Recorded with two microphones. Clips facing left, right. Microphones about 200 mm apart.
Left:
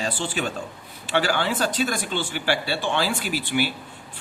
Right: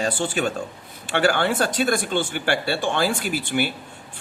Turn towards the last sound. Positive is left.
turn(degrees=-50)  # may be behind; listen again after turning